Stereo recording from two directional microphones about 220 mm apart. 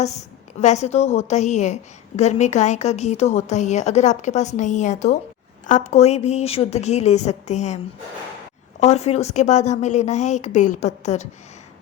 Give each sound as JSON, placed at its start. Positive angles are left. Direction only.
{"t": 0.0, "sound": "a woman's voice", "side_deg": 30}
{"t": 8.8, "sound": "a woman's voice", "side_deg": 30}